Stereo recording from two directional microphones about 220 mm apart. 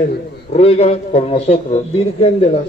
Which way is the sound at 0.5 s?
30° left (ahead or behind).